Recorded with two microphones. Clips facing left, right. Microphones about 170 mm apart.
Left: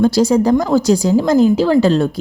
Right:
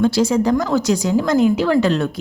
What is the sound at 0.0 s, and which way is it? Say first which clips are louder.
A woman's voice: left 3 dB; 40° left (ahead or behind).